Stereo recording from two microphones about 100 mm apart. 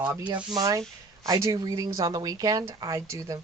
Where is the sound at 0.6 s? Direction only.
35° right (ahead or behind).